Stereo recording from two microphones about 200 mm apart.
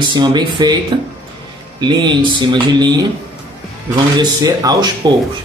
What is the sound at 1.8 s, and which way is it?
Speech, 25° right (ahead or behind).